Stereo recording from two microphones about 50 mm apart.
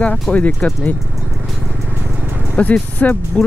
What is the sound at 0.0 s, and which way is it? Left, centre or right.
Speech, left.